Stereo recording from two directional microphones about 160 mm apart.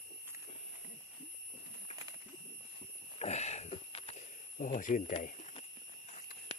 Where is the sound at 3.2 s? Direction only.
45° left (ahead or behind).